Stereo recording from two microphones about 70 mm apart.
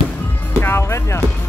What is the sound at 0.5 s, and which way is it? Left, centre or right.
Music, left.